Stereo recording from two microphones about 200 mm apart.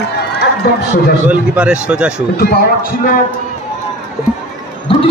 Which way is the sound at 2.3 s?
50° left (ahead or behind).